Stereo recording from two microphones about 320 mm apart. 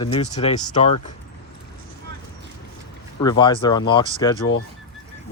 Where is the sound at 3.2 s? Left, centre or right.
Centre.